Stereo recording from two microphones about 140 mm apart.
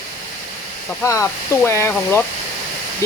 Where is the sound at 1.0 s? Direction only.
20° left (ahead or behind).